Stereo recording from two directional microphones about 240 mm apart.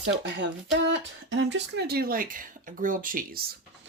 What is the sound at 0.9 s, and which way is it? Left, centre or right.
Speech, right.